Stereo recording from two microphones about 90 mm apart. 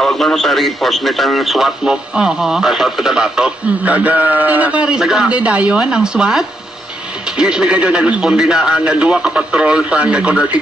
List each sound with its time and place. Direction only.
0.0 s a man's voice: 5° left (ahead or behind); by 4.9 s 15° right (ahead or behind)
4.9 s a man's voice: 5° right (ahead or behind)